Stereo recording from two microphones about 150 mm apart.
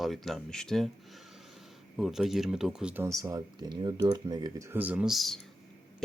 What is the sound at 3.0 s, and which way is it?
Speech, 20° right (ahead or behind).